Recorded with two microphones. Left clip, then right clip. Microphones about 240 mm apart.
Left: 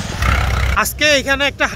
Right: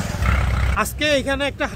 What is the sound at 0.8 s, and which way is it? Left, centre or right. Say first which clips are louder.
Speech: left 5 dB; centre.